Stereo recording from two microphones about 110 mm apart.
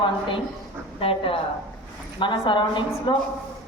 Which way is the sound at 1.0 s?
55° left (ahead or behind).